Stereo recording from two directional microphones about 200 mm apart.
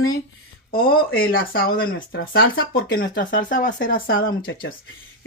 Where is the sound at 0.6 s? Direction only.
45° left (ahead or behind).